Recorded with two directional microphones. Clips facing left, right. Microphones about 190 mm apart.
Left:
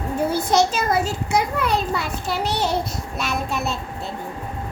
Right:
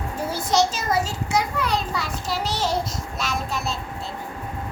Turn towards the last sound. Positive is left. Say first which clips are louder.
# left 3 dB
turn(degrees=60)  # may be behind; listen again after turning